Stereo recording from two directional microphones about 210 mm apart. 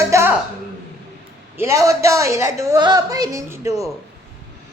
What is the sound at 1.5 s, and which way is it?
A woman's voice, 15° right (ahead or behind).